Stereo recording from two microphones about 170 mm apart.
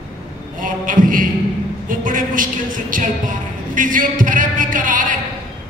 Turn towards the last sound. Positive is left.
turn(degrees=-50)  # may be behind; listen again after turning